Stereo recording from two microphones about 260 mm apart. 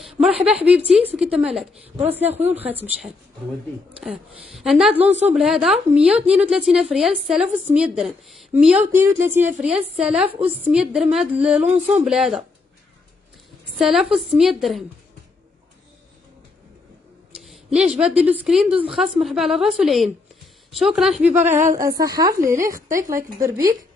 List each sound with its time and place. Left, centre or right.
0.7 s a woman's voice: centre
4.0 s speech: centre
5.0 s speech: right
5.3 s speech: centre
11.6 s speech: right
12.0 s speech: centre
13.7 s a woman's voice: centre
17.3 s a sound: centre
18.3 s a woman's voice: centre
22.8 s speech: right
23.1 s a woman's voice: centre